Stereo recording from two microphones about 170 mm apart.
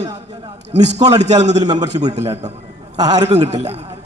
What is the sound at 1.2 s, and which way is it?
A man's voice, 40° right (ahead or behind).